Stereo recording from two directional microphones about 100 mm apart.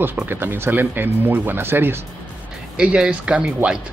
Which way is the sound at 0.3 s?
20° right (ahead or behind).